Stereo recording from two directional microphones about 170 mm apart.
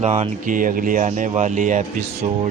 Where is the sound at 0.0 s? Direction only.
40° right (ahead or behind).